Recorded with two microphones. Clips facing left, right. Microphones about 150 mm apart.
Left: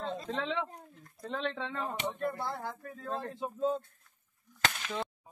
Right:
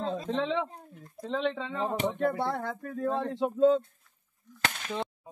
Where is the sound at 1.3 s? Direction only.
15° right (ahead or behind).